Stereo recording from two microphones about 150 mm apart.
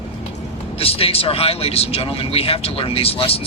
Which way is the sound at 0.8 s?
40° left (ahead or behind).